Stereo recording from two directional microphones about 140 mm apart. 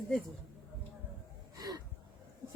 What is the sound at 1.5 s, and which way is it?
Gasp, 30° right (ahead or behind).